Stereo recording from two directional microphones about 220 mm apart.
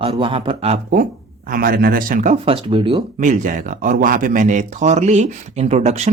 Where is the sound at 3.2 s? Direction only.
35° right (ahead or behind).